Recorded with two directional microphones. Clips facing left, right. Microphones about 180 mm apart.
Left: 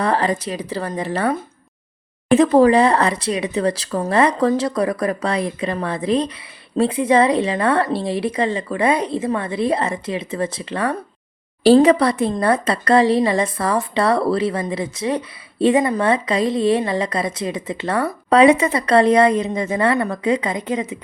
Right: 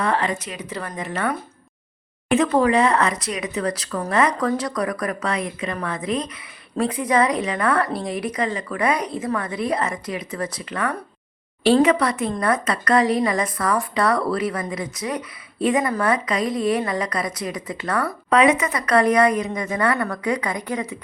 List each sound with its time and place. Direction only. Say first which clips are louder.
0.0 s speech: left 3 dB; 35° left (ahead or behind)